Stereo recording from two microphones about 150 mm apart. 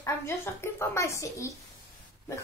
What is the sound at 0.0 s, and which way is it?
Speech, 15° left (ahead or behind).